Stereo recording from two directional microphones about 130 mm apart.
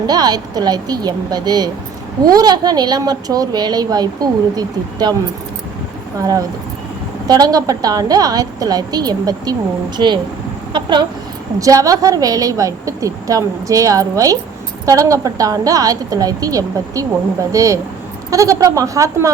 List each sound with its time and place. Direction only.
0.1 s a woman's voice: 30° right (ahead or behind)
7.3 s a woman's voice: 30° right (ahead or behind)